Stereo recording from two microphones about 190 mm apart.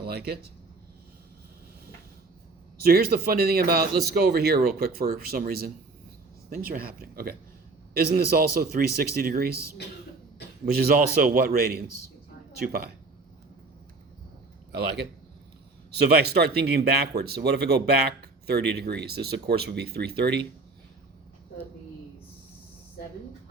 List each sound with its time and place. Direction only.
0.0 s speech: 55° right (ahead or behind)
2.8 s speech: 50° right (ahead or behind)
10.8 s speech: 50° right (ahead or behind)
16.0 s speech: 60° right (ahead or behind)